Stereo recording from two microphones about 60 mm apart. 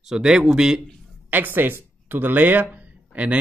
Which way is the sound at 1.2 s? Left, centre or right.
Right.